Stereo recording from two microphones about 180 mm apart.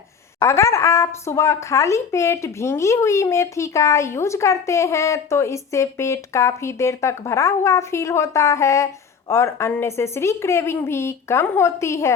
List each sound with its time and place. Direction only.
0.3 s speech: 15° left (ahead or behind)